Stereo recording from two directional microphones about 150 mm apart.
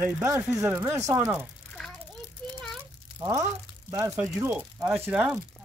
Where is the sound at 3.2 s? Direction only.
20° right (ahead or behind).